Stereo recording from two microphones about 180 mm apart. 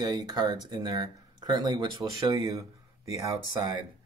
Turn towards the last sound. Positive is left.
turn(degrees=-20)  # may be behind; listen again after turning